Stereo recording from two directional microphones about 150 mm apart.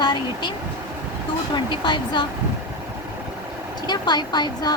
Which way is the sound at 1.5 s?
30° left (ahead or behind).